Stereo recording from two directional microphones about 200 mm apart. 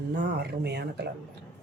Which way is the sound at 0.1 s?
55° right (ahead or behind).